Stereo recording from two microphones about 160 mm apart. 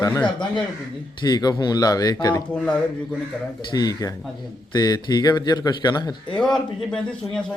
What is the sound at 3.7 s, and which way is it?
A man's voice, 25° left (ahead or behind).